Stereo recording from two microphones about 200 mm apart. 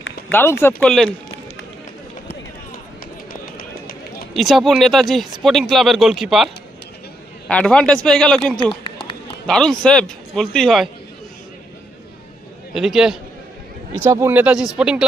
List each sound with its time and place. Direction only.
0.3 s speech: 10° left (ahead or behind)
3.4 s run: 45° left (ahead or behind)
4.4 s speech: centre (ahead or behind)
8.7 s run: 25° left (ahead or behind)
9.5 s speech: 5° left (ahead or behind)
12.7 s speech: centre (ahead or behind)
14.0 s speech: 15° right (ahead or behind)